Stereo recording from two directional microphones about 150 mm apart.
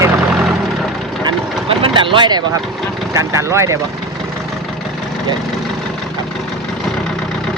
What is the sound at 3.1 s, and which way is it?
Speech, 20° right (ahead or behind).